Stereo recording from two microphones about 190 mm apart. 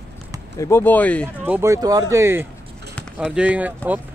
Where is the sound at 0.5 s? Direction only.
15° left (ahead or behind).